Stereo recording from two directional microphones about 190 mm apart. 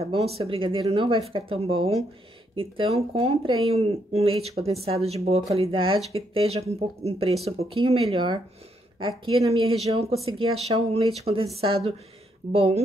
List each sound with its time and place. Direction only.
0.0 s speech: 30° right (ahead or behind)